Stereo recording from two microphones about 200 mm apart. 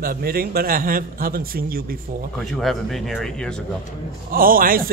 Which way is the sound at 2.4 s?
Centre (ahead or behind).